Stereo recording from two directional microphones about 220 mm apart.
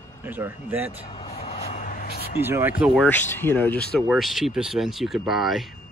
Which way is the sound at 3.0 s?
10° left (ahead or behind).